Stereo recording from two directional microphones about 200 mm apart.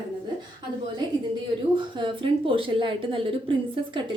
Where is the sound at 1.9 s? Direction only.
25° right (ahead or behind).